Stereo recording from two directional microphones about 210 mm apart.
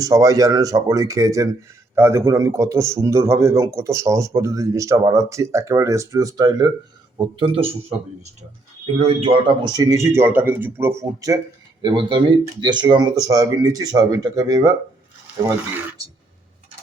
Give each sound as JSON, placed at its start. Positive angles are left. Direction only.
{"t": 0.0, "sound": "a man's voice", "side_deg": -15}
{"t": 16.0, "sound": "music", "side_deg": -15}